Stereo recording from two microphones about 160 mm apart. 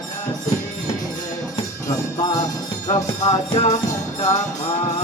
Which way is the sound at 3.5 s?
45° left (ahead or behind).